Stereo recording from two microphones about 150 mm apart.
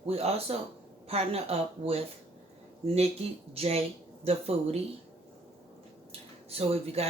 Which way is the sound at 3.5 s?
40° right (ahead or behind).